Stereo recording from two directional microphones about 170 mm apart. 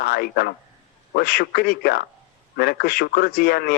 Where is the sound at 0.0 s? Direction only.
60° left (ahead or behind).